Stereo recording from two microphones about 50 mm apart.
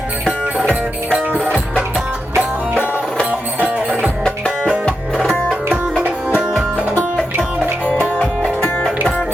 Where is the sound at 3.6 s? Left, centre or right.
Right.